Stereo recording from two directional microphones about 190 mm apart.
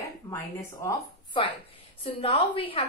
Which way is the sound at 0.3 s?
15° left (ahead or behind).